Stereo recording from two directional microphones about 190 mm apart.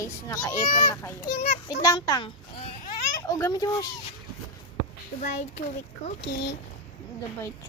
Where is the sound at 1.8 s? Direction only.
20° left (ahead or behind).